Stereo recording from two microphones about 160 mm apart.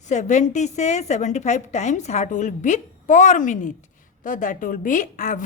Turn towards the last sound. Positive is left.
turn(degrees=50)  # may be behind; listen again after turning